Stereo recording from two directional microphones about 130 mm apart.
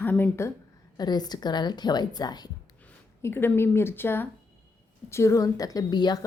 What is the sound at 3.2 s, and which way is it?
A woman's voice, 15° left (ahead or behind).